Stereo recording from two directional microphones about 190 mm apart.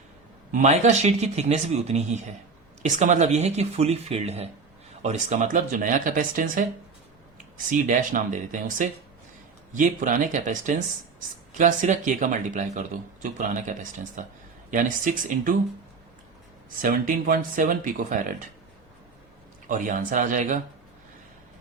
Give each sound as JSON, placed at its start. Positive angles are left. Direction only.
{"t": 0.5, "sound": "speech", "side_deg": -40}
{"t": 16.6, "sound": "speech", "side_deg": -45}
{"t": 19.6, "sound": "speech", "side_deg": -45}